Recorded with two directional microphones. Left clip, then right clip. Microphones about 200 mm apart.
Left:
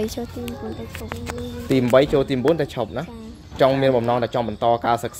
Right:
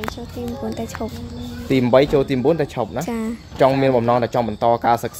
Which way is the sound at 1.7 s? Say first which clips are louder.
Right 2 dB; 5° right (ahead or behind).